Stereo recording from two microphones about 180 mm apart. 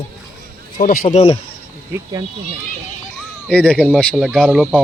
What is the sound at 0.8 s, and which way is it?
Speech, 45° left (ahead or behind).